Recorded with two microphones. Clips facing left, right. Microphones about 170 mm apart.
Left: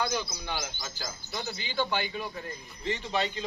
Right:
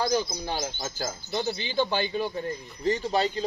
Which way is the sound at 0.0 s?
40° right (ahead or behind).